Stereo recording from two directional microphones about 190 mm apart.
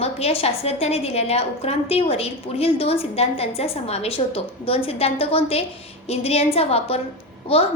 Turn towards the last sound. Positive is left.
turn(degrees=30)  # may be behind; listen again after turning